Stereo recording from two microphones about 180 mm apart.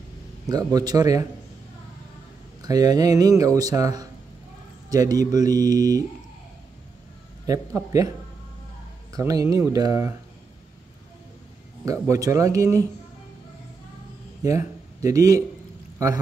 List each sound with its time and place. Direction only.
0.5 s speech: 20° right (ahead or behind)
2.6 s speech: 20° right (ahead or behind)
7.4 s speech: 20° right (ahead or behind)
9.1 s speech: 20° right (ahead or behind)
11.8 s speech: 20° right (ahead or behind)
14.4 s speech: 20° right (ahead or behind)